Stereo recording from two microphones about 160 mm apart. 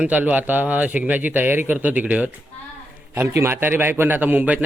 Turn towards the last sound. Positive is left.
turn(degrees=-10)  # may be behind; listen again after turning